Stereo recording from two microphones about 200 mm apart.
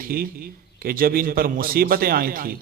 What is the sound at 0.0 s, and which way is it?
A man's voice, 45° right (ahead or behind).